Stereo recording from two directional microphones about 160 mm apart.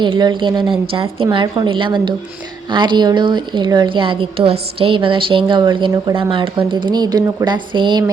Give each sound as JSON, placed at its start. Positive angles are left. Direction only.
{"t": 0.0, "sound": "a woman's voice", "side_deg": -30}